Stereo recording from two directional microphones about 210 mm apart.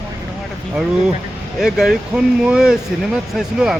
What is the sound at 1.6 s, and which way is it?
Speech, centre (ahead or behind).